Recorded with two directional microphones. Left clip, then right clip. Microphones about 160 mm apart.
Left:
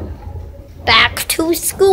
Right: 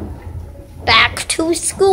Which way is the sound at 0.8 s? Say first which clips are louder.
Left 1 dB; centre (ahead or behind).